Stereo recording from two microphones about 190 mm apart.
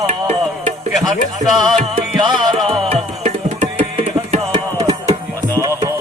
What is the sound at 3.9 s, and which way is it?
Music, 30° right (ahead or behind).